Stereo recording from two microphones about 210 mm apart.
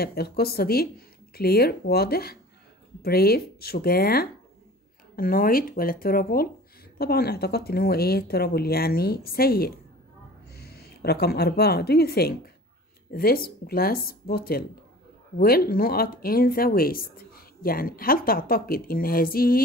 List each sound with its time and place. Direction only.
0.0 s a woman's voice: 50° left (ahead or behind)